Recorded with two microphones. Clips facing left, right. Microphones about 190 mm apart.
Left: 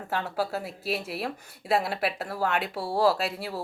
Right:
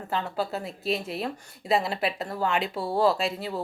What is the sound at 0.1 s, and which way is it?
A woman's voice, 5° left (ahead or behind).